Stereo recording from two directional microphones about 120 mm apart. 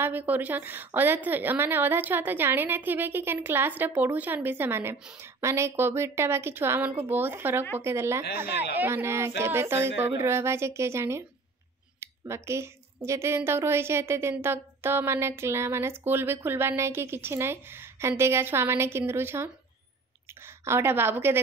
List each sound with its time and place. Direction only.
0.0 s a woman's voice: 15° right (ahead or behind)
4.9 s a woman's voice: 5° right (ahead or behind)
5.2 s a woman's voice: 25° right (ahead or behind)